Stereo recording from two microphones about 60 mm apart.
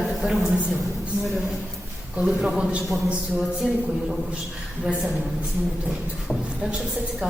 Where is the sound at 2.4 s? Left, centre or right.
Centre.